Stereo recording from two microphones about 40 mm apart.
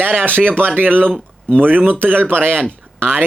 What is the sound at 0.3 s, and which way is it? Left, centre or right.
Speech, right.